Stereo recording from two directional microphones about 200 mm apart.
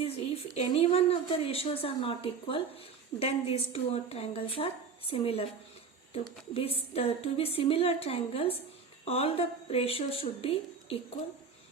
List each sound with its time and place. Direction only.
0.0 s a woman's voice: 30° left (ahead or behind)
6.5 s a woman's voice: 30° left (ahead or behind)